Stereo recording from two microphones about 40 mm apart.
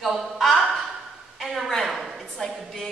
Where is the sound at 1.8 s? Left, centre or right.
Centre.